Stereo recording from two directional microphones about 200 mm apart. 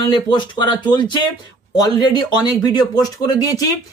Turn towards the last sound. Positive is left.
turn(degrees=20)  # may be behind; listen again after turning